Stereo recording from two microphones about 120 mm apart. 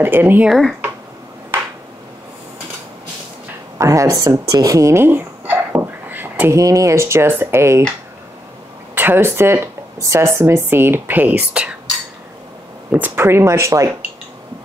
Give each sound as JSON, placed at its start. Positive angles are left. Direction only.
{"t": 0.0, "sound": "speech", "side_deg": -15}
{"t": 0.5, "sound": "speech", "side_deg": 5}
{"t": 3.7, "sound": "a sound", "side_deg": -25}
{"t": 6.6, "sound": "speech", "side_deg": -25}
{"t": 8.9, "sound": "speech", "side_deg": -15}
{"t": 12.9, "sound": "speech", "side_deg": -15}